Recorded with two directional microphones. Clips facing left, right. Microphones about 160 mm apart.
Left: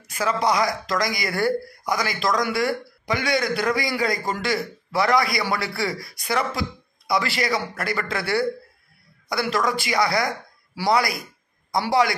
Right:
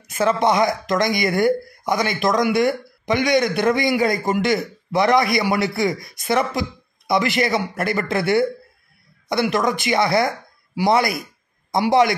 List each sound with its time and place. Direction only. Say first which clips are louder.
0.0 s a man's voice: right 5 dB; 25° right (ahead or behind)